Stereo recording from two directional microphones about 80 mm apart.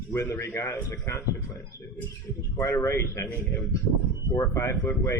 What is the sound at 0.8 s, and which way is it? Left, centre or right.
Speech, left.